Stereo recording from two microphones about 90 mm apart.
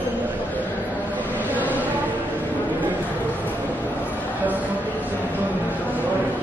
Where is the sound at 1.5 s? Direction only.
20° right (ahead or behind).